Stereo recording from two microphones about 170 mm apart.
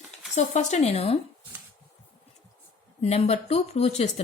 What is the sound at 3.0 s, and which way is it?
Speech, 40° left (ahead or behind).